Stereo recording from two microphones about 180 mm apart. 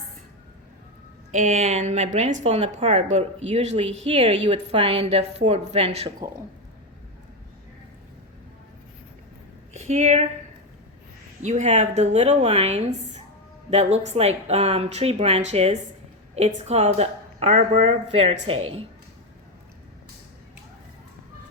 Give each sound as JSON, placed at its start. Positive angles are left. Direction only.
{"t": 1.3, "sound": "speech", "side_deg": -40}
{"t": 9.7, "sound": "a woman's voice", "side_deg": -35}
{"t": 11.4, "sound": "speech", "side_deg": -40}